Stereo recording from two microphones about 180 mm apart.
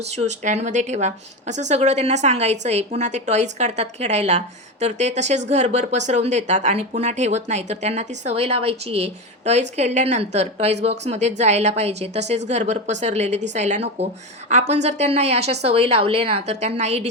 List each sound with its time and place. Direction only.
0.0 s speech: 40° right (ahead or behind)